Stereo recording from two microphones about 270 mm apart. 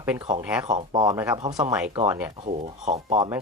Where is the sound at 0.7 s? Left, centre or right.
Centre.